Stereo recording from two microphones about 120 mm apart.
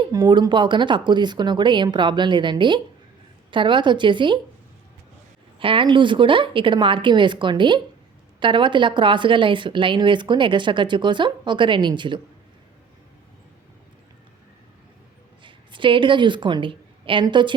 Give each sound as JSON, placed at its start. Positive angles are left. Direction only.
{"t": 0.1, "sound": "a woman's voice", "side_deg": -40}
{"t": 5.5, "sound": "a woman's voice", "side_deg": -45}
{"t": 15.4, "sound": "a woman's voice", "side_deg": -45}